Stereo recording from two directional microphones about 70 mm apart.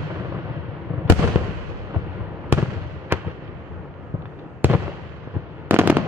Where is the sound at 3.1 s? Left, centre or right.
Right.